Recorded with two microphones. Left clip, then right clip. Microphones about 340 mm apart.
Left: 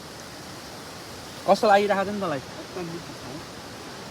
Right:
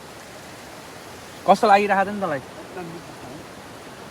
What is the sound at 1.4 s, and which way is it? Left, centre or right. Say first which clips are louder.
Speech: right 4 dB; right.